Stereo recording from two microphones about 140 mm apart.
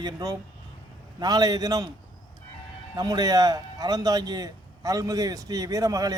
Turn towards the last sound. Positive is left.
turn(degrees=-25)  # may be behind; listen again after turning